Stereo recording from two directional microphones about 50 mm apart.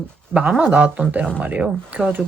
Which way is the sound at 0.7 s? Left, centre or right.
Right.